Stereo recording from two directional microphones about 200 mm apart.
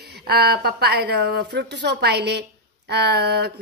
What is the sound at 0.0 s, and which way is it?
A woman's voice, 55° right (ahead or behind).